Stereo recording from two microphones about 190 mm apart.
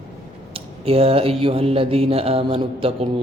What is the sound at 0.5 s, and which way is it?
Speech, 30° right (ahead or behind).